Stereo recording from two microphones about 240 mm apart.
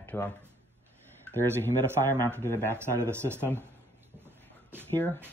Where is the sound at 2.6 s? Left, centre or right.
Centre.